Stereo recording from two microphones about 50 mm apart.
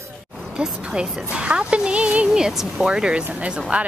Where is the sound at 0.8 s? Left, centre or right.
Right.